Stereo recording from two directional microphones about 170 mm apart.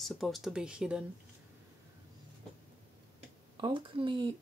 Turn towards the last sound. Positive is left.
turn(degrees=-30)  # may be behind; listen again after turning